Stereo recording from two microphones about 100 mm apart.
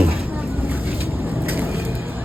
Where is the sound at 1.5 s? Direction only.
25° right (ahead or behind).